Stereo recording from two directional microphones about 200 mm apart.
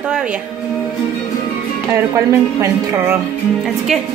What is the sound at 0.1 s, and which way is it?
Speech, 5° right (ahead or behind).